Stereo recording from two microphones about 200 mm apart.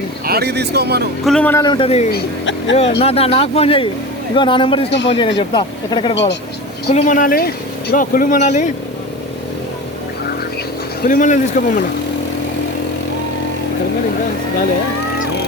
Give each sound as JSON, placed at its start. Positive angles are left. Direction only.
{"t": 0.3, "sound": "speech", "side_deg": -55}
{"t": 1.2, "sound": "speech", "side_deg": 5}
{"t": 1.6, "sound": "speech", "side_deg": 25}
{"t": 2.1, "sound": "speech", "side_deg": 70}
{"t": 3.0, "sound": "speech", "side_deg": 30}
{"t": 6.9, "sound": "speech", "side_deg": 40}
{"t": 11.1, "sound": "speech", "side_deg": 40}